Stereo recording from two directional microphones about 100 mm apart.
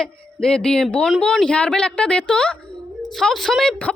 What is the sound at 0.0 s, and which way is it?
A woman's voice, 5° left (ahead or behind).